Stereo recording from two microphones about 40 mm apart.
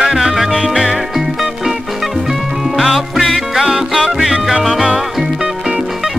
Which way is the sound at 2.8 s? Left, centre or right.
Centre.